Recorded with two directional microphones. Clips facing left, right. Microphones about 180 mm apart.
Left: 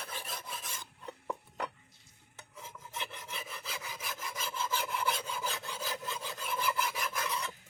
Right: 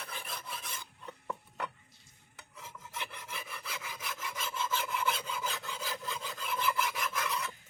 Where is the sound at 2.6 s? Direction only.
25° left (ahead or behind).